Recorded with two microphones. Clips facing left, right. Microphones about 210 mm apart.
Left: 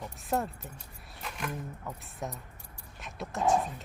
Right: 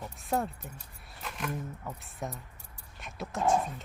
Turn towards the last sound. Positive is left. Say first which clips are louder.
# even
turn(degrees=0)  # may be behind; listen again after turning